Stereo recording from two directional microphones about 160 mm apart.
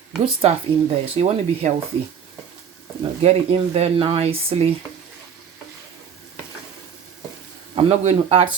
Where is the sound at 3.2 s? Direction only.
40° right (ahead or behind).